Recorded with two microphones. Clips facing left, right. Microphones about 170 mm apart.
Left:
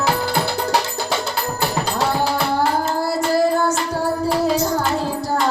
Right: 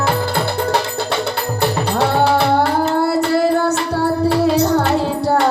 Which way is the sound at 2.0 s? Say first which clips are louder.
Right 6 dB; 65° right (ahead or behind).